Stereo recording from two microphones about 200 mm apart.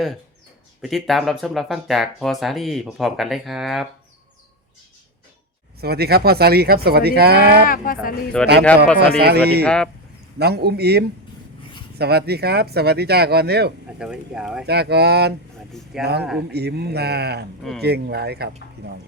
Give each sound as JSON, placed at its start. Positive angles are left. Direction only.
{"t": 0.8, "sound": "speech", "side_deg": 0}
{"t": 5.8, "sound": "speech", "side_deg": -50}
{"t": 7.9, "sound": "speech", "side_deg": 45}
{"t": 8.4, "sound": "speech", "side_deg": 5}
{"t": 9.0, "sound": "speech", "side_deg": -55}
{"t": 9.6, "sound": "speech", "side_deg": 5}
{"t": 10.3, "sound": "speech", "side_deg": -55}
{"t": 14.0, "sound": "speech", "side_deg": -5}
{"t": 14.7, "sound": "speech", "side_deg": -55}
{"t": 15.9, "sound": "speech", "side_deg": 0}
{"t": 16.5, "sound": "speech", "side_deg": -55}